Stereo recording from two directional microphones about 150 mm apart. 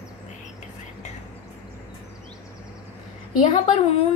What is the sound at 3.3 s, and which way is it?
Speech, 55° left (ahead or behind).